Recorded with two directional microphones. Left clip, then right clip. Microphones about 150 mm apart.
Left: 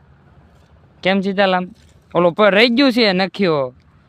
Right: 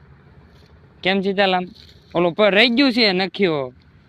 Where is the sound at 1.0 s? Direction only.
50° left (ahead or behind).